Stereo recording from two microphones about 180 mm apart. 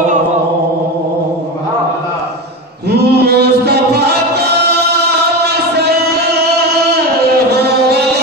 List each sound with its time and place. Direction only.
3.0 s chant: 65° right (ahead or behind)
5.5 s music: 65° right (ahead or behind)
7.6 s a sound: 65° right (ahead or behind)